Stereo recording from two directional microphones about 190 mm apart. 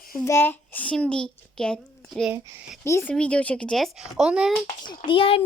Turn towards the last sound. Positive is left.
turn(degrees=30)  # may be behind; listen again after turning